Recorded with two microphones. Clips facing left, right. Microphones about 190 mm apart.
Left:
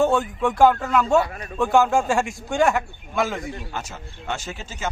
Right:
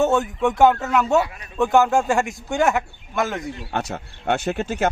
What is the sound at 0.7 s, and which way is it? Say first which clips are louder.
A man's voice: even; 5° right (ahead or behind).